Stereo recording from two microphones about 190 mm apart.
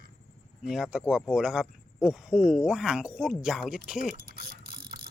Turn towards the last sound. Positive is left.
turn(degrees=-55)  # may be behind; listen again after turning